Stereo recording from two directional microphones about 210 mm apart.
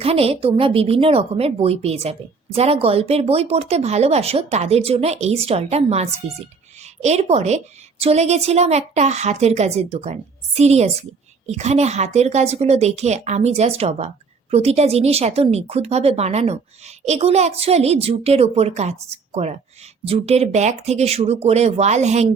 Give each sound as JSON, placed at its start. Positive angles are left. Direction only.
{"t": 0.0, "sound": "a woman's voice", "side_deg": -30}